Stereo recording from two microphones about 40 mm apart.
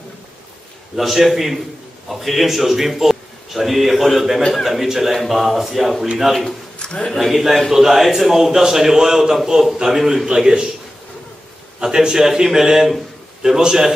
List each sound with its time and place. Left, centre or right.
0.9 s a man's voice: centre
4.4 s a man's voice: centre
4.6 s a man's voice: centre
6.8 s a sound: left
7.2 s a man's voice: centre
11.8 s a man's voice: centre